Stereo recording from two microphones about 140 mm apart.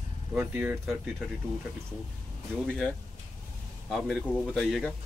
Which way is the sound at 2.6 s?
Centre (ahead or behind).